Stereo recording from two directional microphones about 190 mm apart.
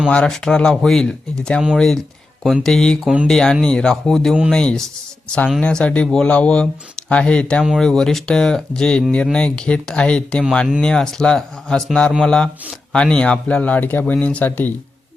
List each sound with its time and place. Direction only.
0.0 s speech: 5° left (ahead or behind)